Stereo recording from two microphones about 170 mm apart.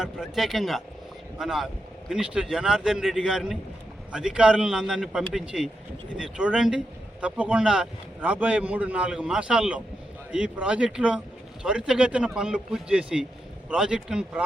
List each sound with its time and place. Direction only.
0.0 s speech: centre (ahead or behind)